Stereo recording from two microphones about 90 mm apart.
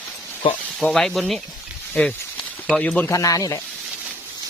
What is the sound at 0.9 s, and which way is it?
Speech, centre (ahead or behind).